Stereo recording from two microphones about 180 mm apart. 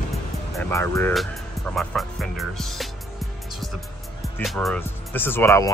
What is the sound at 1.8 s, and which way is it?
Speech, centre (ahead or behind).